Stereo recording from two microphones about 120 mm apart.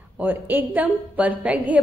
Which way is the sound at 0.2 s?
15° right (ahead or behind).